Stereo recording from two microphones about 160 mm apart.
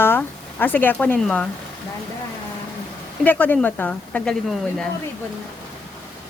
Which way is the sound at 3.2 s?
10° left (ahead or behind).